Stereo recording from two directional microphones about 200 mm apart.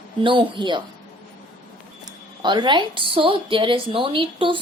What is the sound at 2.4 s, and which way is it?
A woman's voice, 25° right (ahead or behind).